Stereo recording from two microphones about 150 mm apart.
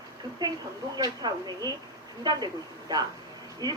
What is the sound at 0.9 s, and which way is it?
Speech, 25° right (ahead or behind).